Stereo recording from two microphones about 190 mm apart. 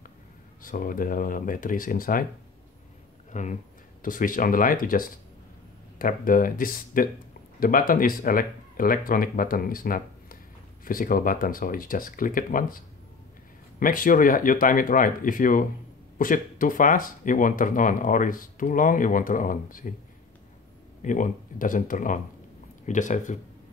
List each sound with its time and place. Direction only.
0.6 s speech: 45° left (ahead or behind)
3.3 s speech: 40° left (ahead or behind)
13.7 s speech: 45° left (ahead or behind)
21.0 s speech: 45° left (ahead or behind)